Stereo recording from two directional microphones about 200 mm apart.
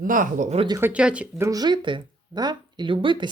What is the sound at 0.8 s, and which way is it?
Speech, 5° right (ahead or behind).